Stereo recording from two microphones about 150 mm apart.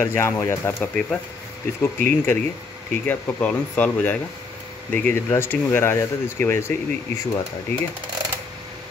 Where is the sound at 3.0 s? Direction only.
10° left (ahead or behind).